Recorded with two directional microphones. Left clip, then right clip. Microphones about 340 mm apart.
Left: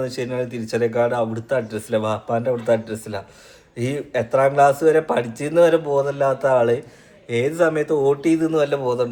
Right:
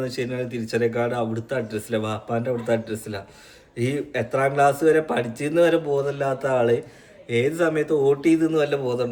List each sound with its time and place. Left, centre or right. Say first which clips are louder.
0.0 s speech: left 3 dB; centre